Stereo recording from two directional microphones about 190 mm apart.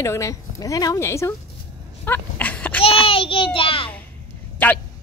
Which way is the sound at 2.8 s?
30° left (ahead or behind).